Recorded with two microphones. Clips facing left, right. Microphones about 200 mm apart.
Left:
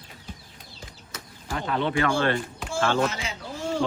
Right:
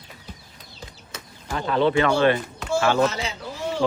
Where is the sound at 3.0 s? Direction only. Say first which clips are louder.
Right 4 dB; 40° right (ahead or behind).